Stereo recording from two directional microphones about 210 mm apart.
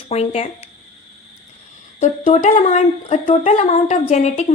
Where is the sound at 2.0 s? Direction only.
30° left (ahead or behind).